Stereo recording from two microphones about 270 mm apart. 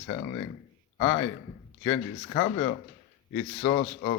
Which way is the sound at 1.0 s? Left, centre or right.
Left.